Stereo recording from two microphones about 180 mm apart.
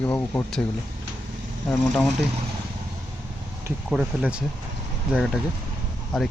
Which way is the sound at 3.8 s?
5° right (ahead or behind).